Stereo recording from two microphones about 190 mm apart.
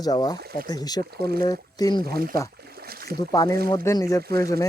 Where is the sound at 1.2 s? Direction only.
55° right (ahead or behind).